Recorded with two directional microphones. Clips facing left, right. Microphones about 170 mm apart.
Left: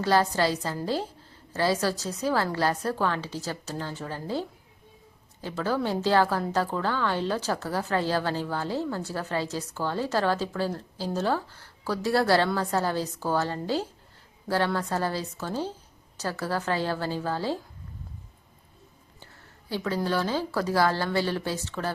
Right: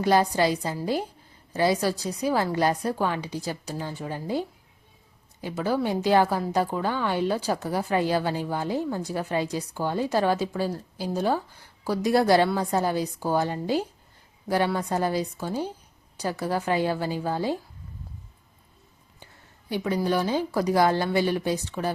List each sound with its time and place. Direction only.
0.0 s a woman's voice: 15° right (ahead or behind)
19.2 s a sound: 15° right (ahead or behind)
20.0 s a woman's voice: 15° right (ahead or behind)